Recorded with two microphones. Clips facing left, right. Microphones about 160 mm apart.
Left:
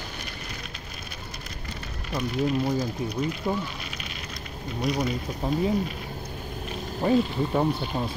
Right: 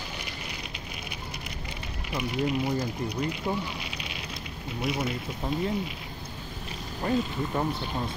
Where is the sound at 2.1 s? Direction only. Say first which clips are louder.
Left 2 dB; 15° right (ahead or behind).